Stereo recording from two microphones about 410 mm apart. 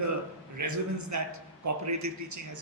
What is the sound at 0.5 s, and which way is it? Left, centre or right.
A man's voice, right.